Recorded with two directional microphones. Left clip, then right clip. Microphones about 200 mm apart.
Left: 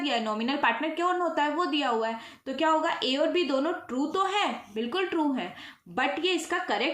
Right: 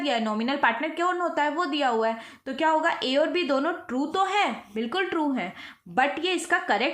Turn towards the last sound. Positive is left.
turn(degrees=-40)  # may be behind; listen again after turning